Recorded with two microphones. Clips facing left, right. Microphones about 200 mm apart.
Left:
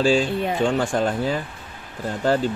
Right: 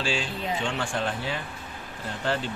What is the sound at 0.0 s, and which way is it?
Speech, 40° left (ahead or behind).